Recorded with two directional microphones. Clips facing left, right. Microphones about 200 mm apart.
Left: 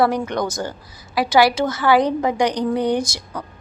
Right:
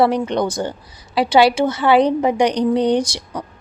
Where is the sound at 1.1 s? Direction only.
30° right (ahead or behind).